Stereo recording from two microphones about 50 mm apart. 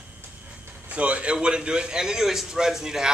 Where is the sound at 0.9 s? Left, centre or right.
Right.